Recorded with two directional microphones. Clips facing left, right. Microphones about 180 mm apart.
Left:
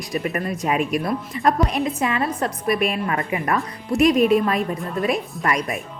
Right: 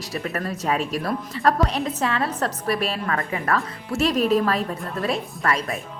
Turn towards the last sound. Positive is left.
turn(degrees=15)  # may be behind; listen again after turning